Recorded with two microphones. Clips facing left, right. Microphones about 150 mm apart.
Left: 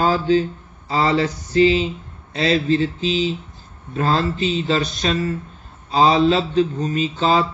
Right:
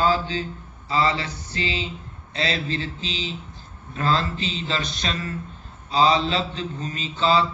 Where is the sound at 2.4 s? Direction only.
40° left (ahead or behind).